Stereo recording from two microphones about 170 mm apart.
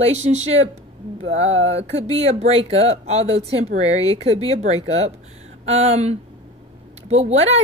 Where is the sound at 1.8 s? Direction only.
35° right (ahead or behind).